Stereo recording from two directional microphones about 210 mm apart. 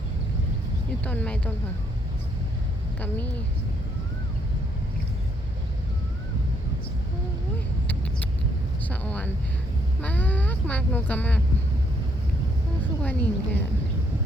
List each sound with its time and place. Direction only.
1.0 s speech: 5° left (ahead or behind)
3.0 s speech: 10° left (ahead or behind)
8.8 s speech: 5° left (ahead or behind)
13.0 s speech: 5° left (ahead or behind)